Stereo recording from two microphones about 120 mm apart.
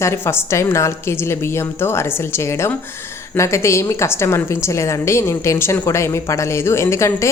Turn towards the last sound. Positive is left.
turn(degrees=25)  # may be behind; listen again after turning